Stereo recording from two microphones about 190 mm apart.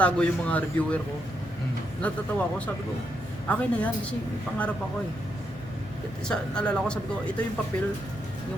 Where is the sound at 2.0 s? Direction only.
10° left (ahead or behind).